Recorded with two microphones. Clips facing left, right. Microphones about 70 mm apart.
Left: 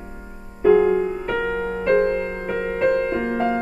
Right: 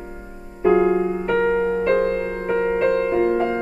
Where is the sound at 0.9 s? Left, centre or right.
Centre.